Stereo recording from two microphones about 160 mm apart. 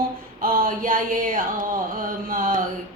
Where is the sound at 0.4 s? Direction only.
60° right (ahead or behind).